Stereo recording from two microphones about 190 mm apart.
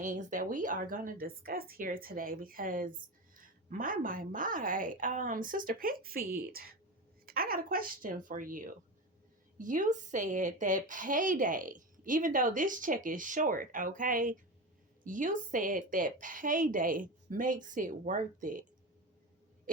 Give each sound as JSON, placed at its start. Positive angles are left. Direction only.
{"t": 0.0, "sound": "speech", "side_deg": -40}
{"t": 19.7, "sound": "owl", "side_deg": -45}